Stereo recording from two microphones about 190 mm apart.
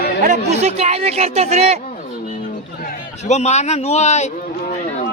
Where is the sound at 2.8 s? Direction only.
45° left (ahead or behind).